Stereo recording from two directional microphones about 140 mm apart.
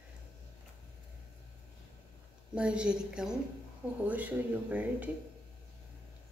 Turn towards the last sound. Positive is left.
turn(degrees=-10)  # may be behind; listen again after turning